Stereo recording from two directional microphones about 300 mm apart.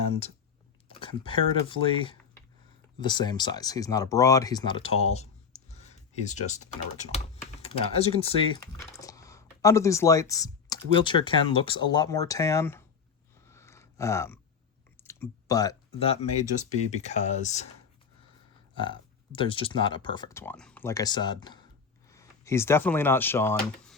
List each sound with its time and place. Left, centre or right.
0.0 s computer keyboard: centre
0.9 s speech: centre
13.5 s a sound: centre
15.0 s clicking: centre
16.9 s speech: left
18.7 s speech: centre